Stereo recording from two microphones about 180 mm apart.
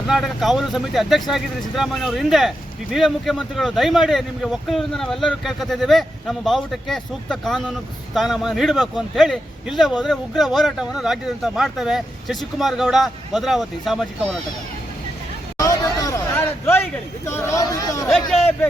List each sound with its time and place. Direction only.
0.1 s a man's voice: centre (ahead or behind)
15.5 s a sound: 20° left (ahead or behind)
17.2 s speech: 15° left (ahead or behind)